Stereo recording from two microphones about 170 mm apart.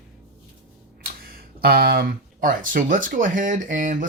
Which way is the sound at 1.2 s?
60° right (ahead or behind).